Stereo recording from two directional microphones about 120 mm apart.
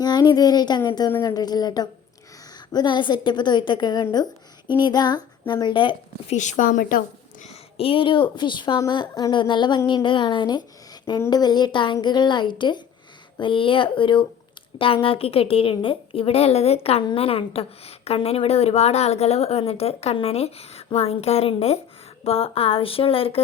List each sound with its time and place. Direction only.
0.0 s a woman's voice: 35° left (ahead or behind)
6.2 s speech: 85° left
7.4 s a woman's voice: 50° left (ahead or behind)